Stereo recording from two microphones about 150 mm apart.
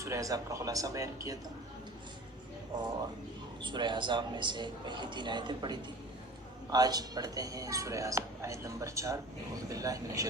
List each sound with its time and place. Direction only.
0.0 s speech: 20° right (ahead or behind)
3.6 s a man's voice: 30° right (ahead or behind)